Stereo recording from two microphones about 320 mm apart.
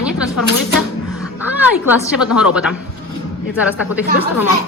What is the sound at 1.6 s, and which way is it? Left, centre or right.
Speech, centre.